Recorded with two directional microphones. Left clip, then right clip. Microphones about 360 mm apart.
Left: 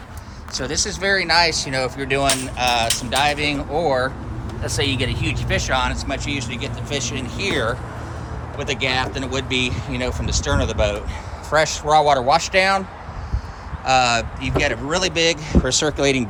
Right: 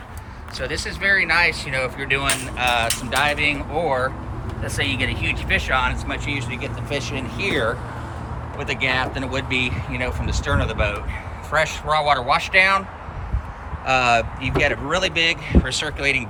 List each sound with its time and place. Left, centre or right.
0.7 s speech: centre
4.6 s speech: centre
13.8 s speech: centre